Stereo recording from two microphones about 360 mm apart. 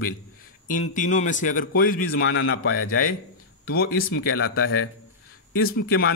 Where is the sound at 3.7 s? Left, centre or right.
Left.